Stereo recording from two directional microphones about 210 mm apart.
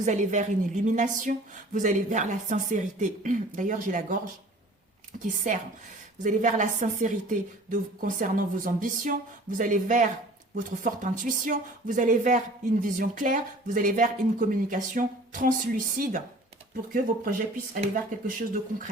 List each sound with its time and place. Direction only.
0.0 s speech: 35° right (ahead or behind)
5.5 s speech: 35° right (ahead or behind)